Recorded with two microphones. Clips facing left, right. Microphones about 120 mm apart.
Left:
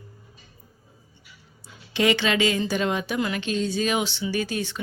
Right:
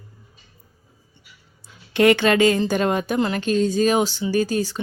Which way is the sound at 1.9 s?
55° right (ahead or behind).